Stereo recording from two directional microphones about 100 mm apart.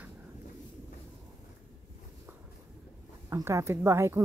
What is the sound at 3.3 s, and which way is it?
Speech, 30° right (ahead or behind).